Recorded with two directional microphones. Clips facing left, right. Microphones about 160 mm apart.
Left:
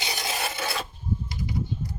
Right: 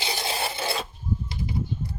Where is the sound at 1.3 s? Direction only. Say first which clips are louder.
Right 1 dB; 25° right (ahead or behind).